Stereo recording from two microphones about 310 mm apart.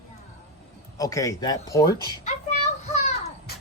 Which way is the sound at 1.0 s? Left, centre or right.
Centre.